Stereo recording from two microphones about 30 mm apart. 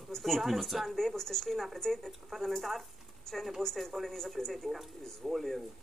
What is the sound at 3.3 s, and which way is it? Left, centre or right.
Speech, centre.